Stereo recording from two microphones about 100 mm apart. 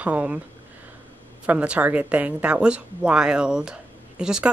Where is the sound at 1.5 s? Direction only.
15° right (ahead or behind).